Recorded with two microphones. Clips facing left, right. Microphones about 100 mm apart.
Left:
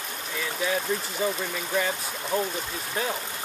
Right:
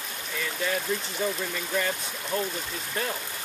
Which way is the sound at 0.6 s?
5° left (ahead or behind).